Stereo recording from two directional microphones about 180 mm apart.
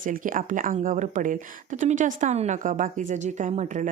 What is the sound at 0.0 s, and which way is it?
Speech, 50° right (ahead or behind).